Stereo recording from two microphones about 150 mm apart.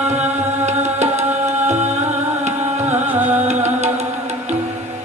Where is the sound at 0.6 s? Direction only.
50° right (ahead or behind).